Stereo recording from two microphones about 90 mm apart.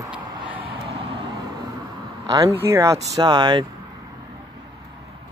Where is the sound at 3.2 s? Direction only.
60° right (ahead or behind).